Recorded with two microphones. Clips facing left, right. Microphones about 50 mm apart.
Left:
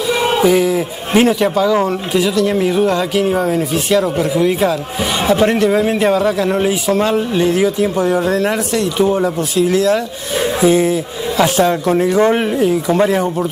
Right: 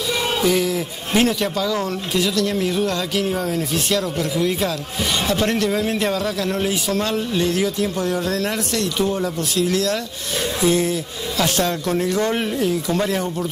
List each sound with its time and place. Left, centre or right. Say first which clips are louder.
0.1 s a man's voice: left 7 dB; centre